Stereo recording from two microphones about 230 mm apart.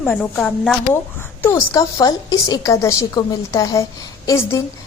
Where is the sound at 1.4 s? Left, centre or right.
Centre.